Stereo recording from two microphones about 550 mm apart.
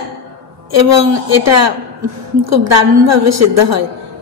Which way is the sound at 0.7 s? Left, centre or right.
Right.